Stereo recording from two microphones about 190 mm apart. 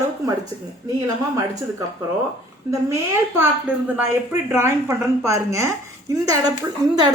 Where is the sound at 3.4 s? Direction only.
10° right (ahead or behind).